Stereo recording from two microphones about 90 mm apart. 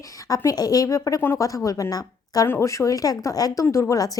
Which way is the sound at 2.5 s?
30° left (ahead or behind).